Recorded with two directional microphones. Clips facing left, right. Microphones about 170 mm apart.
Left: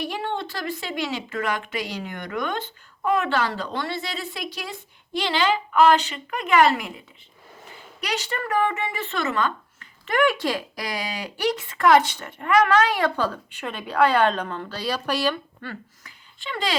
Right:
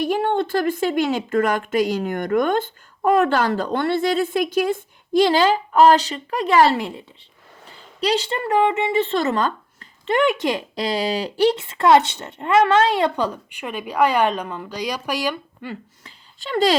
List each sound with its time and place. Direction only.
0.0 s a woman's voice: 50° right (ahead or behind); by 7.0 s 30° right (ahead or behind)
8.0 s speech: 30° right (ahead or behind)
10.1 s speech: 20° right (ahead or behind)
16.4 s speech: 40° right (ahead or behind)